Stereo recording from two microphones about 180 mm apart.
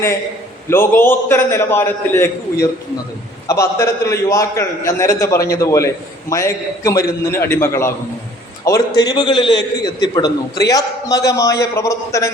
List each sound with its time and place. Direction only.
0.7 s a man's voice: 15° left (ahead or behind)